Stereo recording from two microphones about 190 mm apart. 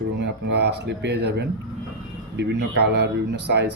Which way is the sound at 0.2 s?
65° right (ahead or behind).